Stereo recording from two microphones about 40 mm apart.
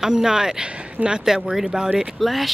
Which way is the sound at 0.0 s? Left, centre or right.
Centre.